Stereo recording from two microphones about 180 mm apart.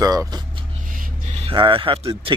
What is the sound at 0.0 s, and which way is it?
Speech, 20° right (ahead or behind).